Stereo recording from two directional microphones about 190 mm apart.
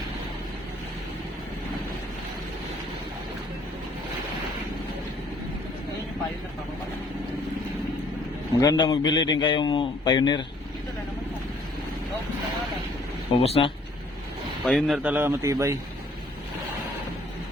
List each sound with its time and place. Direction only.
8.5 s a man's voice: 20° left (ahead or behind)
13.3 s speech: 30° left (ahead or behind)
14.6 s speech: centre (ahead or behind); by 15.8 s 15° right (ahead or behind)